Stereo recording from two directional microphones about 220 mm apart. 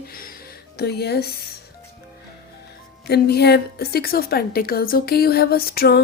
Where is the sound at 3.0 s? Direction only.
45° left (ahead or behind).